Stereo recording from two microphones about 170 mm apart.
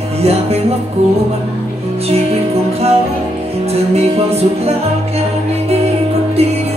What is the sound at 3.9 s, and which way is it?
Music, 35° right (ahead or behind).